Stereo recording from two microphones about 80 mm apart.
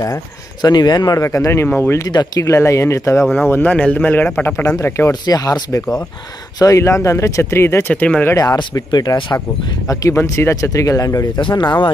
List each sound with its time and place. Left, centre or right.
0.6 s speech: left
1.2 s speech: left
2.0 s speech: left
2.4 s speech: left
3.3 s speech: left
5.2 s speech: left
6.6 s speech: left
7.9 s speech: centre
8.7 s speech: left
10.2 s speech: left
11.3 s speech: left